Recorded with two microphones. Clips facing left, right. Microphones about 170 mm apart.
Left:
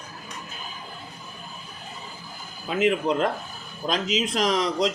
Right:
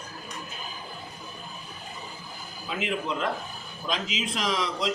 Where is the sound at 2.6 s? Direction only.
45° left (ahead or behind).